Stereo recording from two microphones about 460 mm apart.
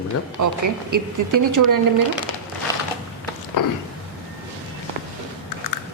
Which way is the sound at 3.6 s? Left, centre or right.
Left.